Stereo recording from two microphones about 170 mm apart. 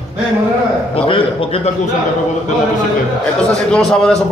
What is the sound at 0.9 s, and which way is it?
Speech, 30° left (ahead or behind).